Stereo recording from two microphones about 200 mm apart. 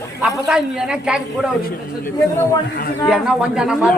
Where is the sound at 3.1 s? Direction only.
5° right (ahead or behind).